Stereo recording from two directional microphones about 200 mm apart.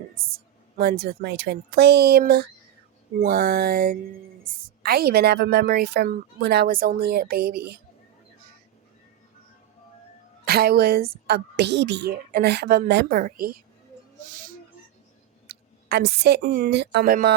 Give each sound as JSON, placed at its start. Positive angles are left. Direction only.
{"t": 0.8, "sound": "a woman's voice", "side_deg": -55}
{"t": 10.4, "sound": "a woman's voice", "side_deg": -50}
{"t": 15.4, "sound": "speech", "side_deg": -55}